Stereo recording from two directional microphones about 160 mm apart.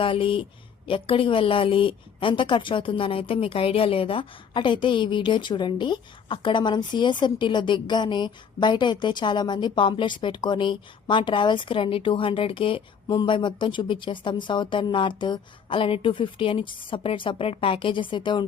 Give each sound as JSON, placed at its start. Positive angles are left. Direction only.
{"t": 0.0, "sound": "a woman's voice", "side_deg": 35}